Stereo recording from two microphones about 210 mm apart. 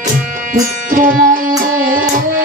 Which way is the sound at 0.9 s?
40° right (ahead or behind).